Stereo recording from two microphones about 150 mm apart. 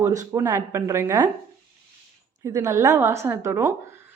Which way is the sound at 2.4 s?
20° right (ahead or behind).